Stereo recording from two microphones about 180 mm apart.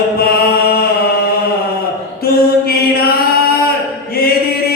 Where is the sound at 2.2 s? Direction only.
60° left (ahead or behind).